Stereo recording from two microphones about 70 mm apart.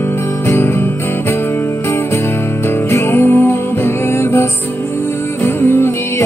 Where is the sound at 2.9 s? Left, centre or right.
Left.